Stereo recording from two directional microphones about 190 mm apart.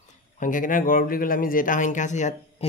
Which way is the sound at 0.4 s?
45° left (ahead or behind).